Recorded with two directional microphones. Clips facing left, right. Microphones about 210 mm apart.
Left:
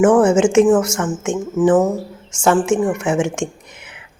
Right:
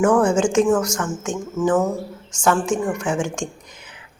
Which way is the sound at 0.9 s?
25° left (ahead or behind).